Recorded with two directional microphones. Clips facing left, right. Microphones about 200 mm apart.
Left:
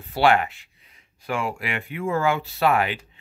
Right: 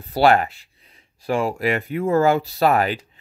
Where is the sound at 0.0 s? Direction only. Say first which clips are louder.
Right 3 dB; 40° right (ahead or behind).